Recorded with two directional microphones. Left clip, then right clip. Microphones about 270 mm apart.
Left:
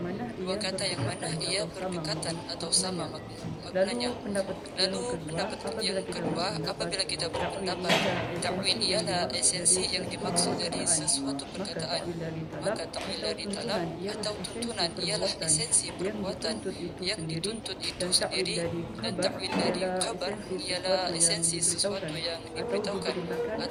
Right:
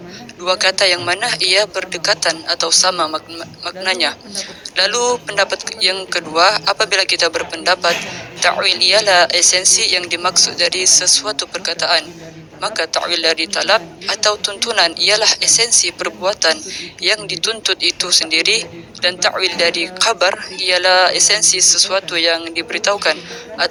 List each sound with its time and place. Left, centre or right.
0.4 s a man's voice: right